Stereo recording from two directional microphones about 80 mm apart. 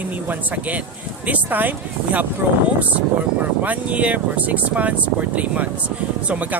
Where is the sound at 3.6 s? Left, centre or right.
Centre.